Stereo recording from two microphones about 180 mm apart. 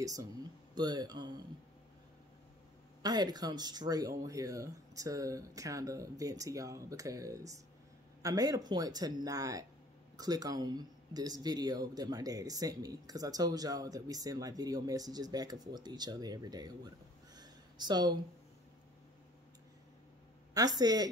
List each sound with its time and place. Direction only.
0.0 s speech: 20° right (ahead or behind)
3.0 s speech: 20° right (ahead or behind)
17.4 s a sound: 25° right (ahead or behind)
20.5 s speech: 20° right (ahead or behind)